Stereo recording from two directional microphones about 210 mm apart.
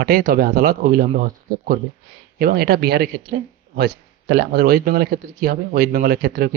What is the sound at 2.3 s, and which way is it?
Speech, 45° right (ahead or behind).